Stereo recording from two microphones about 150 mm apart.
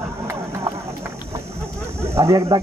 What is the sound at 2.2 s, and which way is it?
Speech, 20° right (ahead or behind).